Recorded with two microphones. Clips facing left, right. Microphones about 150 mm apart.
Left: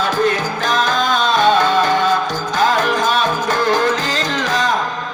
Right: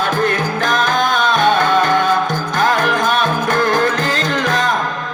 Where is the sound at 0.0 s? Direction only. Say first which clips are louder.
Even; 50° right (ahead or behind).